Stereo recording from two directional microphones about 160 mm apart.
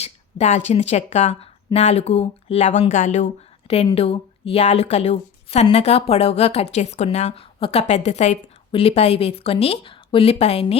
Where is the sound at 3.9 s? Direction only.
40° left (ahead or behind).